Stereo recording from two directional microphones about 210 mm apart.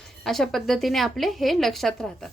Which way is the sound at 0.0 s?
Centre (ahead or behind).